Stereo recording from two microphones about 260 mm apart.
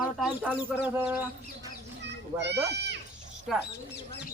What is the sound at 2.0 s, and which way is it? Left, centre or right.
Children playing, right.